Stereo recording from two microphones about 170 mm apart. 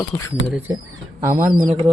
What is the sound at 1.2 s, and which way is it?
Speech, 15° right (ahead or behind).